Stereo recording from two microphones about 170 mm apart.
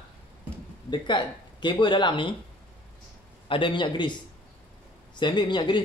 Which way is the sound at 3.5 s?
30° left (ahead or behind).